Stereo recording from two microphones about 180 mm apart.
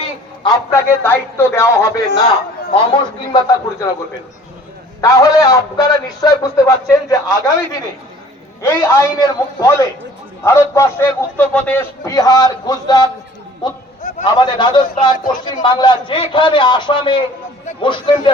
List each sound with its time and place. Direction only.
0.4 s a man's voice: 20° left (ahead or behind)
4.9 s a man's voice: 20° left (ahead or behind)
8.6 s a man's voice: 15° left (ahead or behind)